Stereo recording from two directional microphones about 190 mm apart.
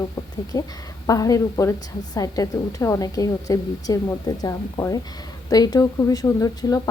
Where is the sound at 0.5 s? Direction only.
20° left (ahead or behind).